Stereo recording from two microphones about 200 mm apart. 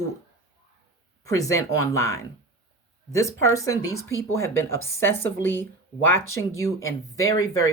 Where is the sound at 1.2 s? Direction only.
15° left (ahead or behind).